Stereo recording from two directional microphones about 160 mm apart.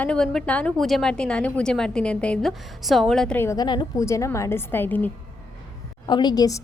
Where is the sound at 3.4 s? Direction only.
20° left (ahead or behind).